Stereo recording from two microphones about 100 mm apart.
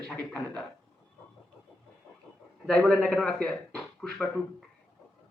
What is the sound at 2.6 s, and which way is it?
Speech, 5° left (ahead or behind).